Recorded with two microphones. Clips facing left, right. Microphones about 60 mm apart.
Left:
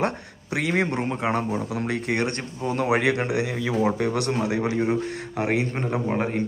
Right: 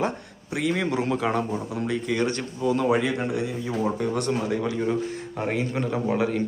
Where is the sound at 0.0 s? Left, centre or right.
Left.